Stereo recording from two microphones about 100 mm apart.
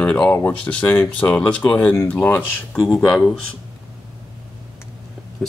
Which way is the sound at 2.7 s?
5° left (ahead or behind).